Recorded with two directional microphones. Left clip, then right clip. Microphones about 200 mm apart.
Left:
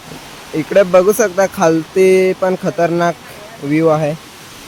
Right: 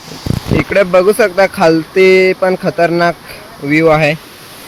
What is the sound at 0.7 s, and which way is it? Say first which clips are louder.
Speech: even; 5° right (ahead or behind).